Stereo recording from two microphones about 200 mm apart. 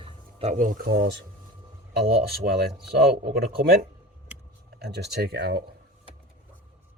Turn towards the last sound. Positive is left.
turn(degrees=-55)  # may be behind; listen again after turning